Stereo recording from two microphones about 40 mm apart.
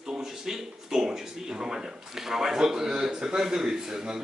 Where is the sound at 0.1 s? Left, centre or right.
Centre.